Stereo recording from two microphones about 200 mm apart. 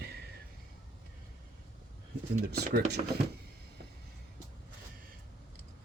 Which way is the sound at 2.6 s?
50° right (ahead or behind).